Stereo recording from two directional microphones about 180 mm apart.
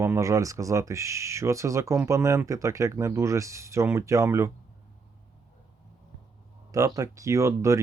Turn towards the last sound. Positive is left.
turn(degrees=-15)  # may be behind; listen again after turning